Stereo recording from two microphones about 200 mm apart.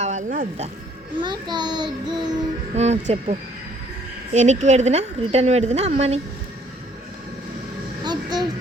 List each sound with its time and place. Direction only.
0.0 s speech: 35° right (ahead or behind)
1.2 s child singing: 20° right (ahead or behind)
2.7 s a woman's voice: 35° right (ahead or behind)
4.4 s a woman's voice: 35° right (ahead or behind)
8.0 s a sound: 20° right (ahead or behind)